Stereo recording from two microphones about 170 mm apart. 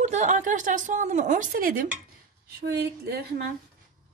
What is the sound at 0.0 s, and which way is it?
A woman's voice, 45° right (ahead or behind).